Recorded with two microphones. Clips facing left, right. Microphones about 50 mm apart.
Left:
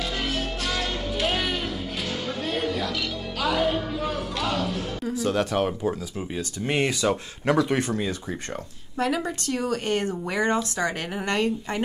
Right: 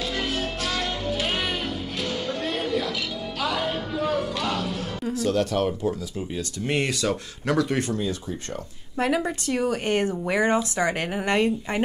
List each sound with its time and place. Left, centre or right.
0.6 s music: centre
5.2 s speech: left
8.9 s speech: centre